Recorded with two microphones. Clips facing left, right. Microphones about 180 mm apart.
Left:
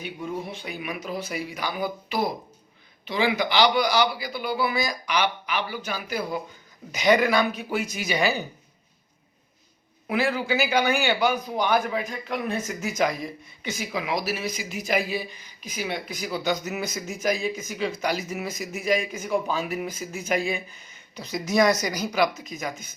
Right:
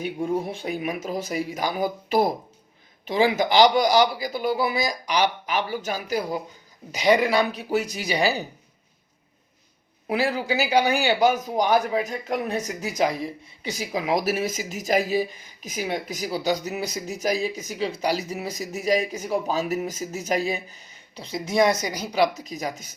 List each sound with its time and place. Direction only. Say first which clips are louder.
0.0 s a man's voice: right 6 dB; 50° right (ahead or behind); by 8.4 s 35° right (ahead or behind)
10.1 s speech: right 1 dB; 35° right (ahead or behind)